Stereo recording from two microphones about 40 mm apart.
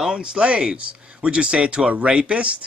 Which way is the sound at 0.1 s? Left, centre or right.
Right.